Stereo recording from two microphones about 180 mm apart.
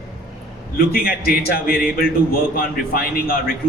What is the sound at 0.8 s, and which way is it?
Speech, 55° left (ahead or behind).